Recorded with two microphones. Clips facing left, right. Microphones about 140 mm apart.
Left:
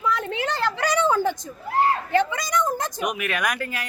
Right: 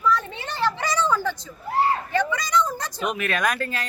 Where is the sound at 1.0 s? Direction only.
50° left (ahead or behind).